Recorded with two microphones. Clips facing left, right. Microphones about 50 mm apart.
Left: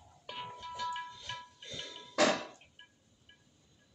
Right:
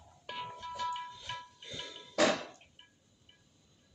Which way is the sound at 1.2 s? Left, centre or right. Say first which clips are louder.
Right 1 dB; centre.